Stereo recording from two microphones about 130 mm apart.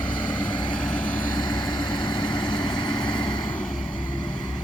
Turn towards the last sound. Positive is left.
turn(degrees=35)  # may be behind; listen again after turning